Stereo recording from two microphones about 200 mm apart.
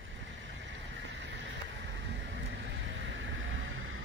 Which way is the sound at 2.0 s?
65° right (ahead or behind).